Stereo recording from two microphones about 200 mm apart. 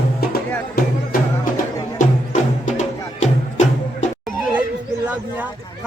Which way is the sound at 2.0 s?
40° left (ahead or behind).